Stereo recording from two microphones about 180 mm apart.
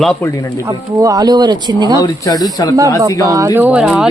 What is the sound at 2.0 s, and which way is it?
Speech, 20° left (ahead or behind).